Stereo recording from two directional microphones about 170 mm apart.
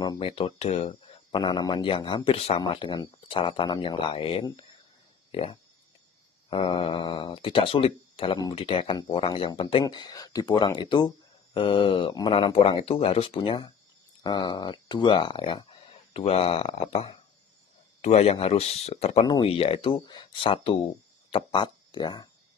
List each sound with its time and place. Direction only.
0.2 s speech: 30° left (ahead or behind)